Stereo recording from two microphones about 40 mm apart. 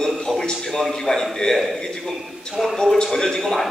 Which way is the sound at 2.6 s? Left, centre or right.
Centre.